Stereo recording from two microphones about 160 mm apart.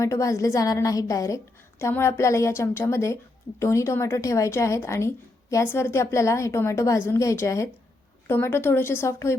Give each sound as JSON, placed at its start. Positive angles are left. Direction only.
{"t": 0.0, "sound": "a woman's voice", "side_deg": 20}